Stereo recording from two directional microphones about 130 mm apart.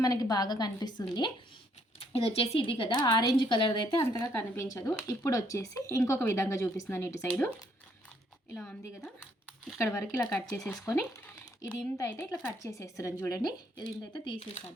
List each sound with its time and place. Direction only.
0.0 s speech: 30° left (ahead or behind)
2.0 s speech: 50° left (ahead or behind); by 7.5 s 20° left (ahead or behind)
8.5 s speech: 10° left (ahead or behind)
11.9 s speech: 25° left (ahead or behind)